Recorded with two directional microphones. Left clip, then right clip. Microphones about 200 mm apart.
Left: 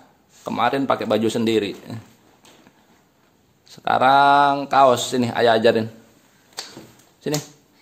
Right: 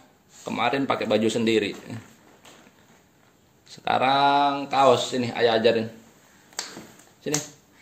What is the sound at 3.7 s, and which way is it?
A man's voice, 25° left (ahead or behind).